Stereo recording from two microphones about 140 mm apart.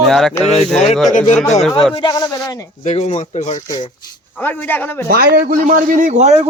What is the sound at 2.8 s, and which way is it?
Speech, 55° left (ahead or behind).